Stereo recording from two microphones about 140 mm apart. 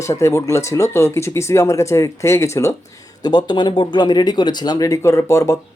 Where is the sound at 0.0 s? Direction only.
20° left (ahead or behind).